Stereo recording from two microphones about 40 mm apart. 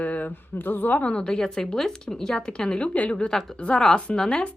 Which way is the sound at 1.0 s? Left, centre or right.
Left.